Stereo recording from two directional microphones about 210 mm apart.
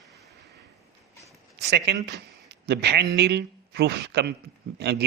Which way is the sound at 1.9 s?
50° right (ahead or behind).